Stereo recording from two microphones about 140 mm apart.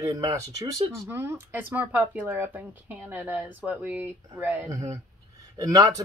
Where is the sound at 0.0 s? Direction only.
25° right (ahead or behind).